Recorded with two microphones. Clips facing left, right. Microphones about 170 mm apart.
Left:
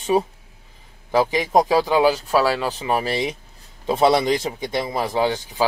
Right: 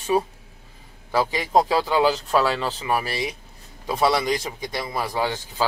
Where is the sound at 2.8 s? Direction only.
20° left (ahead or behind).